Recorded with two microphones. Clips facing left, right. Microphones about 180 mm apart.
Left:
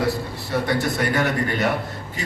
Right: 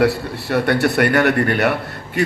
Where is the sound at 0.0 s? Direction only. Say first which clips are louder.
Right 6 dB; 65° right (ahead or behind).